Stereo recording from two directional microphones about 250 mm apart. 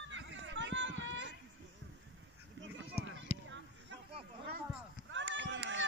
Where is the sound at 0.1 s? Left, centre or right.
Right.